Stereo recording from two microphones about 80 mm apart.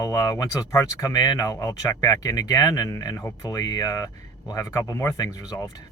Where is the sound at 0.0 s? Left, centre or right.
Left.